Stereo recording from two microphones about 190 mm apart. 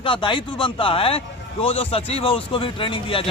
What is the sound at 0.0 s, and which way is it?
Speech, 25° left (ahead or behind).